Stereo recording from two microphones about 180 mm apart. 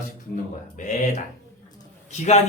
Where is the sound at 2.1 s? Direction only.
40° left (ahead or behind).